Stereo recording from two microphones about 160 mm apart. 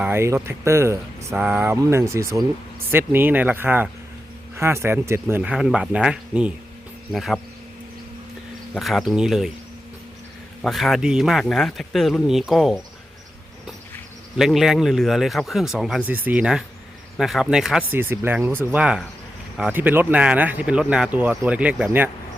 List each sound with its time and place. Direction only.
0.0 s speech: 15° right (ahead or behind)
5.4 s speech: 5° right (ahead or behind)
8.7 s speech: centre (ahead or behind)
10.6 s speech: centre (ahead or behind)
14.3 s speech: centre (ahead or behind)
17.9 s speech: 15° right (ahead or behind)